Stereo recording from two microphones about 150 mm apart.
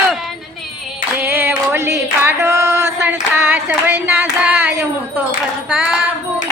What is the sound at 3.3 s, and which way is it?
Clapping, 15° right (ahead or behind).